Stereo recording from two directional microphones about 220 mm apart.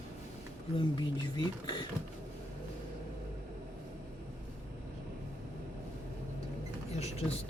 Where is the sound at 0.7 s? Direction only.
20° left (ahead or behind).